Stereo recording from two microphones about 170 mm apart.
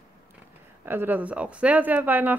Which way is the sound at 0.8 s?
10° right (ahead or behind).